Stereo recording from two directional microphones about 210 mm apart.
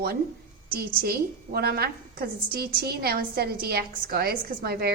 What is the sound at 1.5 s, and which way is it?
A woman's voice, 50° right (ahead or behind).